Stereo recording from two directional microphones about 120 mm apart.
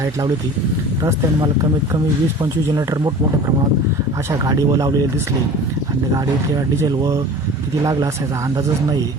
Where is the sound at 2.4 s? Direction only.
30° right (ahead or behind).